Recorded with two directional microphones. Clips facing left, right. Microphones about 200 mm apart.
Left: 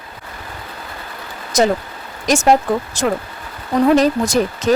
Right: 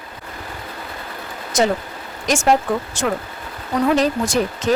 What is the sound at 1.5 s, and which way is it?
Speech, 40° left (ahead or behind).